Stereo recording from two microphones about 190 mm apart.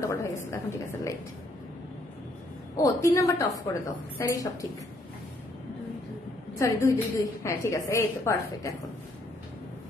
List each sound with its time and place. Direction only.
0.0 s a sound: 15° left (ahead or behind)
2.7 s a woman's voice: 15° left (ahead or behind)
6.6 s a woman's voice: 15° left (ahead or behind)